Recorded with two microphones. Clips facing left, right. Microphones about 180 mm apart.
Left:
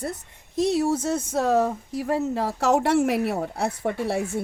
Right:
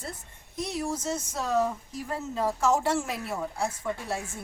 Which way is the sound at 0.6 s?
75° left (ahead or behind).